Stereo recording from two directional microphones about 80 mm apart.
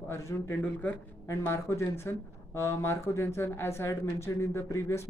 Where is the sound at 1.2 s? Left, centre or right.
Left.